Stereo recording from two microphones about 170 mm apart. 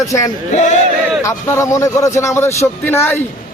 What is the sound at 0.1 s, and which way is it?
A man's voice, 20° left (ahead or behind).